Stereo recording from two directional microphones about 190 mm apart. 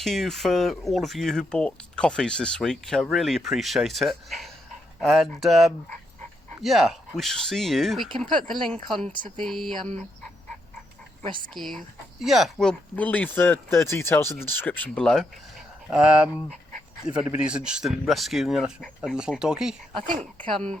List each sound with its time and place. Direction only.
0.0 s speech: centre (ahead or behind)
11.2 s speech: 25° right (ahead or behind)
11.5 s speech: centre (ahead or behind)